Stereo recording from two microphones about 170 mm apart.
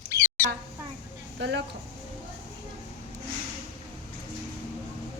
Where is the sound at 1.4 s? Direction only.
90° right.